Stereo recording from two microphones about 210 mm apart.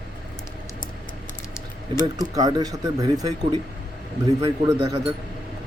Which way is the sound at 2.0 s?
15° right (ahead or behind).